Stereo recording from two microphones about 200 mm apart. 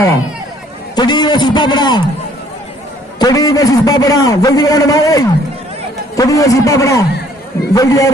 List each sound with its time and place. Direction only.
0.9 s a man's voice: 20° left (ahead or behind)
3.2 s a man's voice: 20° left (ahead or behind)